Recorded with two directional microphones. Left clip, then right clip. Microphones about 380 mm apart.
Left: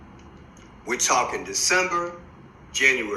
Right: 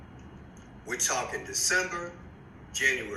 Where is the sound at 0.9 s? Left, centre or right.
Centre.